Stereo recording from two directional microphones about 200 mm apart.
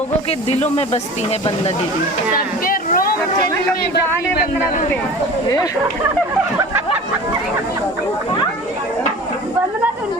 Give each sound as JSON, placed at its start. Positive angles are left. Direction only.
{"t": 0.3, "sound": "speech", "side_deg": 30}
{"t": 2.3, "sound": "speech", "side_deg": 45}